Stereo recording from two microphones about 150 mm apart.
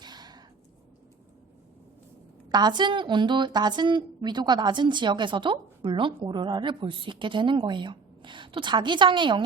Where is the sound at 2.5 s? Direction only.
30° right (ahead or behind).